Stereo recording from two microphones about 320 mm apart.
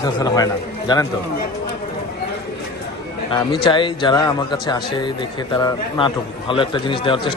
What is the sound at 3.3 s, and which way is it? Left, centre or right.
Speech, centre.